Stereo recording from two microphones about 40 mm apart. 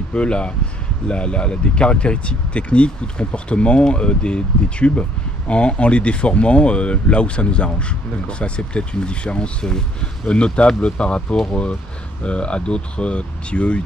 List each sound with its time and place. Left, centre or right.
0.1 s speech: left